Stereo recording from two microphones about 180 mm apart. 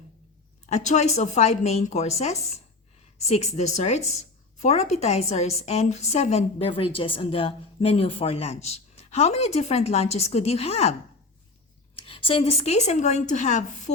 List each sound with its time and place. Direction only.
0.7 s a woman's voice: 40° left (ahead or behind)
12.0 s a woman's voice: 30° left (ahead or behind)